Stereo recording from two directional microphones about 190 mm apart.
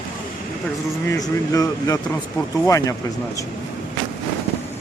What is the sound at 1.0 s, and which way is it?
Speech, 20° left (ahead or behind).